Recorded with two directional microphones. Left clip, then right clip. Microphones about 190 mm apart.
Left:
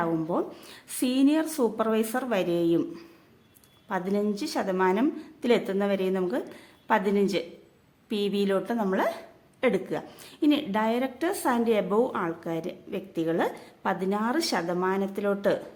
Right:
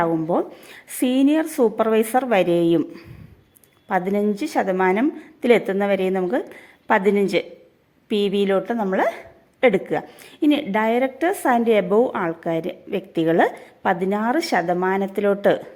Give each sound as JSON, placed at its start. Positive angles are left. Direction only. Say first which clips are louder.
{"t": 0.0, "sound": "a woman's voice", "louder": "right 7 dB", "side_deg": -15}